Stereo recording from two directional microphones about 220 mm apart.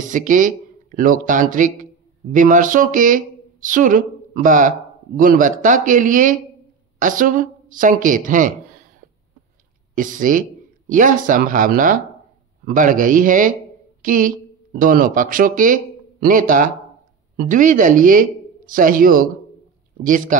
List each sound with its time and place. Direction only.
0.0 s speech: 35° right (ahead or behind)
9.9 s speech: 35° right (ahead or behind)